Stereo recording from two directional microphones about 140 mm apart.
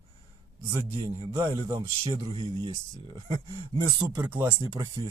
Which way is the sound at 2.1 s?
30° right (ahead or behind).